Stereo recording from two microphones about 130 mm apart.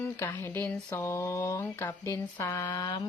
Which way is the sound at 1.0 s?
20° left (ahead or behind).